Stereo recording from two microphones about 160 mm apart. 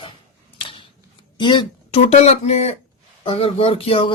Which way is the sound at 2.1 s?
45° left (ahead or behind).